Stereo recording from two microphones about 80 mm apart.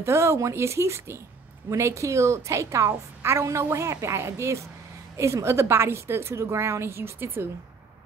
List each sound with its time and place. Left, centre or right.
0.0 s a woman's voice: right